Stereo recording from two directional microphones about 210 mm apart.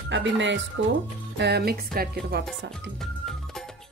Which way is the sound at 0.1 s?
60° right (ahead or behind).